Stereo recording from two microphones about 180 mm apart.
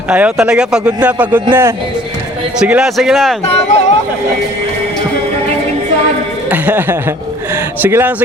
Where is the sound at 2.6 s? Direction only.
5° right (ahead or behind).